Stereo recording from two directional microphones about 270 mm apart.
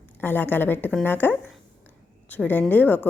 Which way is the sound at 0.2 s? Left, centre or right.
Centre.